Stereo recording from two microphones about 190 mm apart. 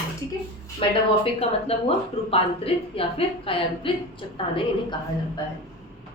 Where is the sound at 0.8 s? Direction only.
30° left (ahead or behind).